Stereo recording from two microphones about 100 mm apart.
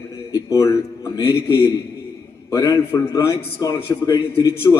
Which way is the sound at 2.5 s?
35° left (ahead or behind).